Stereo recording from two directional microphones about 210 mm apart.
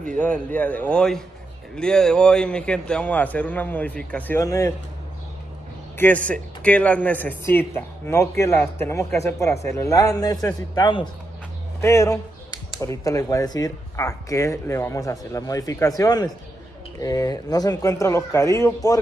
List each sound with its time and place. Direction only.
0.1 s speech: 5° left (ahead or behind)
5.9 s speech: 10° left (ahead or behind)